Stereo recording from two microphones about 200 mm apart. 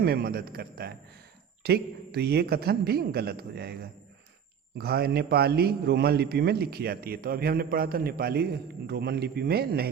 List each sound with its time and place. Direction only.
0.0 s a man's voice: 50° right (ahead or behind)
4.8 s a man's voice: 50° right (ahead or behind)